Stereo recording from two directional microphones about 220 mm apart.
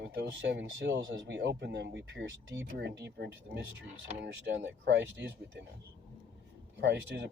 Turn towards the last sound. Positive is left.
turn(degrees=-55)  # may be behind; listen again after turning